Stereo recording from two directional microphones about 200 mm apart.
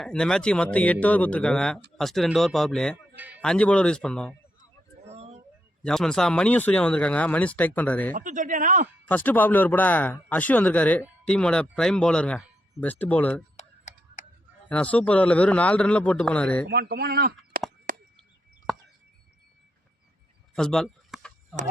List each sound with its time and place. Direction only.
0.0 s speech: 5° left (ahead or behind)
5.0 s a sound: 30° right (ahead or behind)
5.8 s speech: 5° left (ahead or behind)
8.1 s speech: 40° right (ahead or behind)
9.0 s speech: 10° left (ahead or behind)
13.6 s typing: 35° left (ahead or behind)
14.7 s speech: 5° left (ahead or behind)
16.6 s speech: 50° right (ahead or behind)
17.9 s chop: 45° right (ahead or behind)
18.7 s a sound: centre (ahead or behind)
20.6 s a sound: 5° left (ahead or behind)